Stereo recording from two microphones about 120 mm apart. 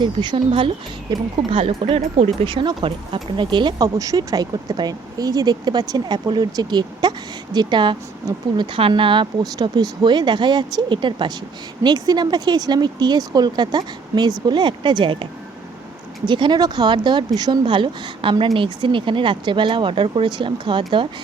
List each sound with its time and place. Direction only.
0.0 s speech: 40° right (ahead or behind)